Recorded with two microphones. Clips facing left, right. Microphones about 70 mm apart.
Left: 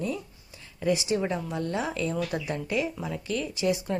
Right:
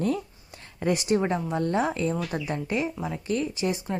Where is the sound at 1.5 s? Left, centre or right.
Right.